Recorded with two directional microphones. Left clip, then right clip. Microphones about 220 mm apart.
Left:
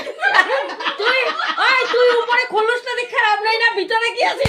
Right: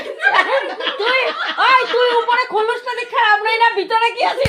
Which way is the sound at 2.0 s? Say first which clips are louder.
Even; 15° left (ahead or behind).